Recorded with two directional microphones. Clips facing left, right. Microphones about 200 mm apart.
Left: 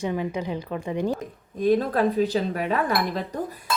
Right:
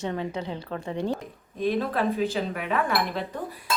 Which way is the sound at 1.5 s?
45° left (ahead or behind).